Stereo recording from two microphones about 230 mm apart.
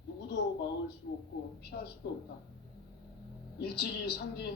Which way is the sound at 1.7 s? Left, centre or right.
Left.